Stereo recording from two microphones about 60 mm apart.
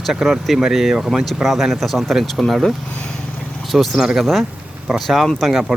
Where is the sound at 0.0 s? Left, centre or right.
Centre.